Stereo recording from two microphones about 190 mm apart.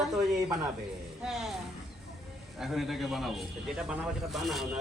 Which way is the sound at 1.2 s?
Centre (ahead or behind).